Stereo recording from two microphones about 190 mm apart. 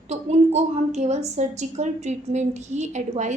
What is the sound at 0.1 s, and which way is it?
A woman's voice, 35° right (ahead or behind).